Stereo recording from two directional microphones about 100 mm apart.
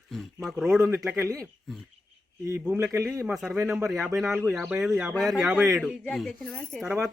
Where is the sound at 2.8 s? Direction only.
30° right (ahead or behind).